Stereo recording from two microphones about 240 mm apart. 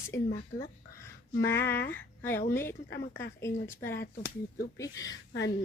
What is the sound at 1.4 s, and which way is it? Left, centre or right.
Speech, centre.